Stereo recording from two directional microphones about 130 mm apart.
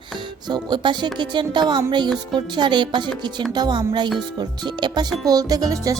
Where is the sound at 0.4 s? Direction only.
35° right (ahead or behind).